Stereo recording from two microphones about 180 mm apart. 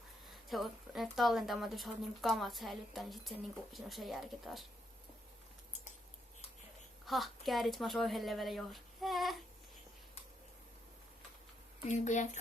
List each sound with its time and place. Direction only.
0.4 s a woman's voice: centre (ahead or behind)
7.0 s a woman's voice: centre (ahead or behind)
11.9 s speech: 40° left (ahead or behind)